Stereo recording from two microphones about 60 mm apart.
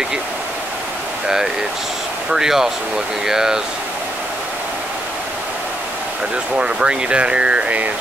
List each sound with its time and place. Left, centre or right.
2.3 s speech: centre
6.5 s speech: centre